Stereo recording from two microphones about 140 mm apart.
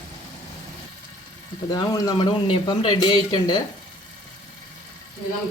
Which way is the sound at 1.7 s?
25° left (ahead or behind).